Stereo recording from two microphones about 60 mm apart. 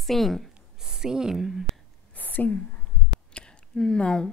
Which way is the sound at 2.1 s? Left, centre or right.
Left.